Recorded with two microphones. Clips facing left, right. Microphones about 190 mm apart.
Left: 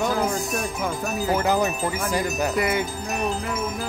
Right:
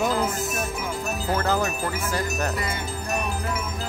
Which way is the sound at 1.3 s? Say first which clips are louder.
Left 2 dB; 15° left (ahead or behind).